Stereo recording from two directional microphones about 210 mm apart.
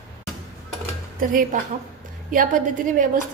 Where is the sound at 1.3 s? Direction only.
40° right (ahead or behind).